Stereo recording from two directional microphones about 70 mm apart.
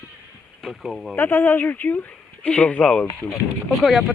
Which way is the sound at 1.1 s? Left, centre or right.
Left.